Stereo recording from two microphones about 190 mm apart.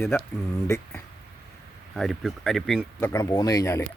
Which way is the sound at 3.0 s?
15° left (ahead or behind).